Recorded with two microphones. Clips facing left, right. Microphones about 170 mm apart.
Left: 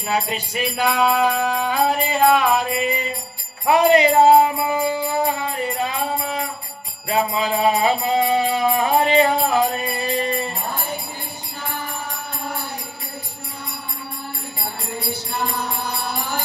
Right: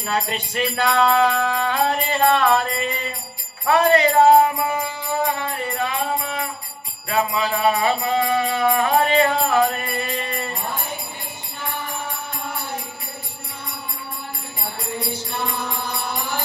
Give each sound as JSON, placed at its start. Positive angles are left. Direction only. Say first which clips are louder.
{"t": 0.1, "sound": "music", "louder": "left 1 dB", "side_deg": 5}
{"t": 2.5, "sound": "mantra", "louder": "even", "side_deg": 15}
{"t": 3.6, "sound": "music", "louder": "left 2 dB", "side_deg": 15}
{"t": 7.1, "sound": "music", "louder": "left 1 dB", "side_deg": 25}